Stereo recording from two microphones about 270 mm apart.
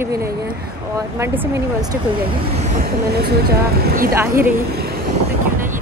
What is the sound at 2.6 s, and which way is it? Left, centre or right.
Speech, right.